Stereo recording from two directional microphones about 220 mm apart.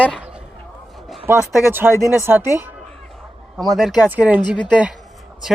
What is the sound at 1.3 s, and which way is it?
Speech, 5° right (ahead or behind).